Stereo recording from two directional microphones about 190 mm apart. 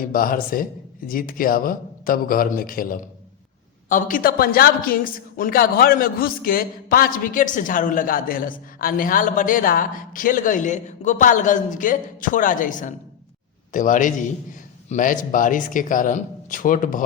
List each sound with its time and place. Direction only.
0.0 s a woman's voice: 50° left (ahead or behind)